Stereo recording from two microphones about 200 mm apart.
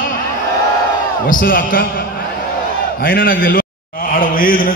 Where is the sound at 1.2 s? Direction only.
45° left (ahead or behind).